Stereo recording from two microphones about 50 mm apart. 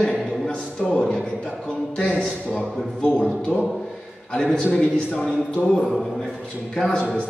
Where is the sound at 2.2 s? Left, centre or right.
Centre.